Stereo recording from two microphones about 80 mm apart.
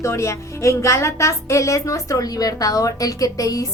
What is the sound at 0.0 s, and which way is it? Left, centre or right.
A woman's voice, left.